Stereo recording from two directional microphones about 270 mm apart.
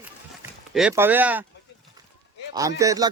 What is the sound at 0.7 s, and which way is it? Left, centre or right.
Speech, centre.